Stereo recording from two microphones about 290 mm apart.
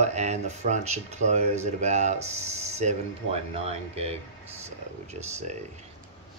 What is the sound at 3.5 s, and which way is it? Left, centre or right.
Speech, right.